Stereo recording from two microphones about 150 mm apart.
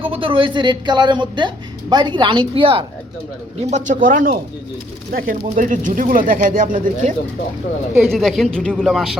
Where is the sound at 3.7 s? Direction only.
50° right (ahead or behind).